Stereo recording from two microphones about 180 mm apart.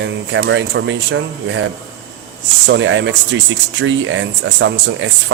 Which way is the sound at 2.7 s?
90° right.